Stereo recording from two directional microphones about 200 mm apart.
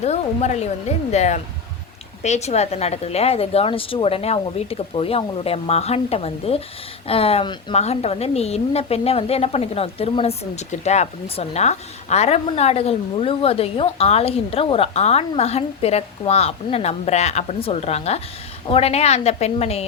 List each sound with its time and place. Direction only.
0.0 s a woman's voice: 35° left (ahead or behind)